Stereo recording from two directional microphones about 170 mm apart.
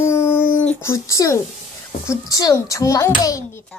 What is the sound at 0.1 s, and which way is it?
Dog, 15° left (ahead or behind).